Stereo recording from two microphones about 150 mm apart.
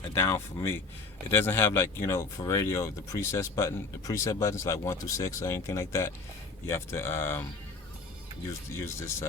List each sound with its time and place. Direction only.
0.0 s speech: 20° left (ahead or behind)